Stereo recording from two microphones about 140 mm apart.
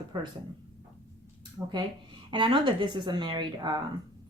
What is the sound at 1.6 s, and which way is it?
Speech, 20° right (ahead or behind).